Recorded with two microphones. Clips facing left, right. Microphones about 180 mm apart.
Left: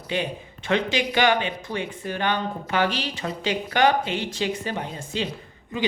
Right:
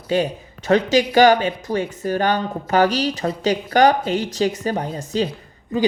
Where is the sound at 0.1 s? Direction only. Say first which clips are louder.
Right 7 dB; 40° right (ahead or behind).